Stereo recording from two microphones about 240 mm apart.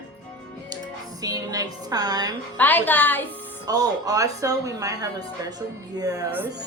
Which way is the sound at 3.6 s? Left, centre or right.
Centre.